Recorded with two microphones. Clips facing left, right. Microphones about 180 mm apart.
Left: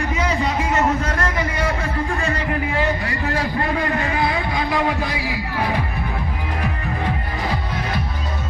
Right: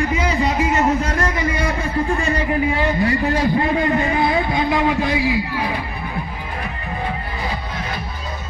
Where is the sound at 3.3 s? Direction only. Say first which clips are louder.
Right 4 dB; 25° right (ahead or behind).